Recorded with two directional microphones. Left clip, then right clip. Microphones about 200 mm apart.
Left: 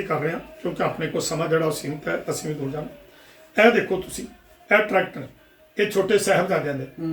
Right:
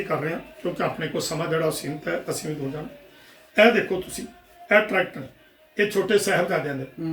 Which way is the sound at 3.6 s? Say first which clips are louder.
Even; 15° right (ahead or behind).